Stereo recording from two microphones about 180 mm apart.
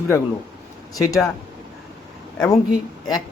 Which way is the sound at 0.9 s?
20° left (ahead or behind).